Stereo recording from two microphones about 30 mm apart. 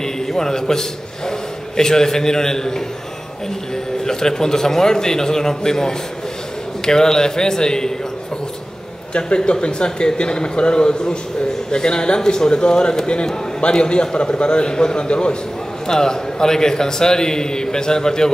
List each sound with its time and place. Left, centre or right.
0.0 s a man's voice: centre
9.5 s a man's voice: left
15.9 s a man's voice: left